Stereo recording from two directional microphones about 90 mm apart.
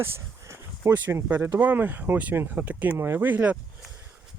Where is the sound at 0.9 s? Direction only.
20° right (ahead or behind).